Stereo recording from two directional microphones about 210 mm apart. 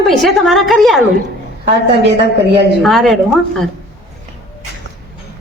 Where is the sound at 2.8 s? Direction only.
Centre (ahead or behind).